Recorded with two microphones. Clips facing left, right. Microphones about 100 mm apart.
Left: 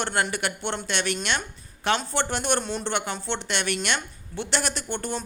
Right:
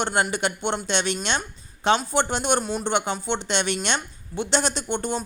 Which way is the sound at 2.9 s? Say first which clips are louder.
Right 6 dB; 20° right (ahead or behind).